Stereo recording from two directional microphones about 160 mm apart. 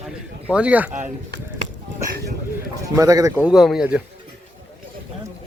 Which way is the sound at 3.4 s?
5° right (ahead or behind).